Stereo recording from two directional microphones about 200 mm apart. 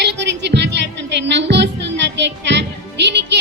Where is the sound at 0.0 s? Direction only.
60° right (ahead or behind).